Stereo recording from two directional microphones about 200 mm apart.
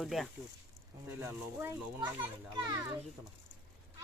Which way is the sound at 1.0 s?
10° right (ahead or behind).